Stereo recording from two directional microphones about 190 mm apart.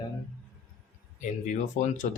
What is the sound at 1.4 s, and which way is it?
Speech, 40° left (ahead or behind).